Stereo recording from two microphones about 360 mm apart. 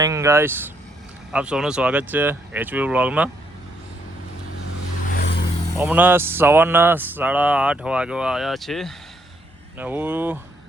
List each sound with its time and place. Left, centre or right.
0.0 s speech: centre
5.1 s vehicle: left
5.7 s speech: centre